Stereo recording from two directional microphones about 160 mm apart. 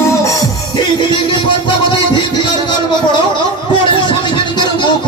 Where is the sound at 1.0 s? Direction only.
30° left (ahead or behind).